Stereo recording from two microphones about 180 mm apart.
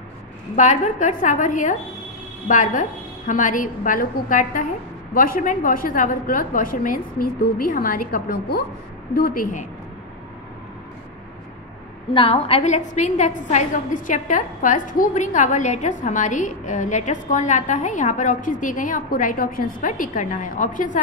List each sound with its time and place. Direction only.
0.6 s a woman's voice: 40° left (ahead or behind)
12.1 s a woman's voice: 30° left (ahead or behind)